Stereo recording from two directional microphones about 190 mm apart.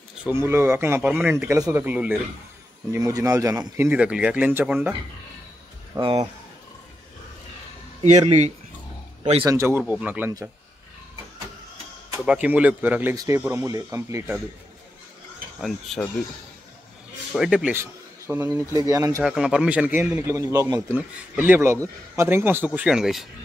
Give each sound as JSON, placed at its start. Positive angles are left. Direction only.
{"t": 0.2, "sound": "speech", "side_deg": -15}
{"t": 5.9, "sound": "speech", "side_deg": -25}
{"t": 8.0, "sound": "speech", "side_deg": -35}
{"t": 9.4, "sound": "speech", "side_deg": -15}
{"t": 12.3, "sound": "speech", "side_deg": -5}
{"t": 15.6, "sound": "speech", "side_deg": 0}
{"t": 17.3, "sound": "speech", "side_deg": -5}
{"t": 19.2, "sound": "speech", "side_deg": -5}